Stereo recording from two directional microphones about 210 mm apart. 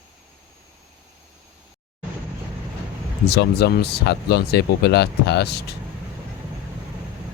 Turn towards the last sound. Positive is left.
turn(degrees=50)  # may be behind; listen again after turning